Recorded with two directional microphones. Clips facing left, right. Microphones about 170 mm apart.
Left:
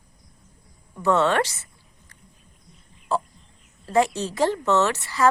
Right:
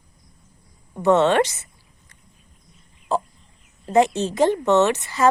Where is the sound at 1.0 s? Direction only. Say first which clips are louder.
Right 4 dB; 20° right (ahead or behind).